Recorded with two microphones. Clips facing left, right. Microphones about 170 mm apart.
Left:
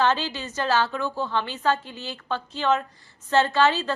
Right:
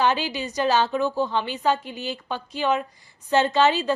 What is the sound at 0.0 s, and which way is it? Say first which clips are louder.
A woman's voice: right 1 dB; 15° right (ahead or behind).